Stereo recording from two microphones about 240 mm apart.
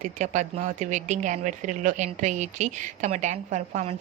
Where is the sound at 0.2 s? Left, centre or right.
Right.